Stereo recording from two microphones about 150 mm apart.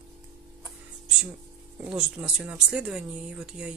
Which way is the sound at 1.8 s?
10° right (ahead or behind).